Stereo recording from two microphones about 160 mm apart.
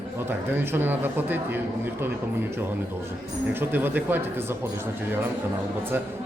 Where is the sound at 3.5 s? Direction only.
15° right (ahead or behind).